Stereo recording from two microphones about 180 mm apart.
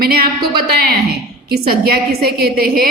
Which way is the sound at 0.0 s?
60° right (ahead or behind).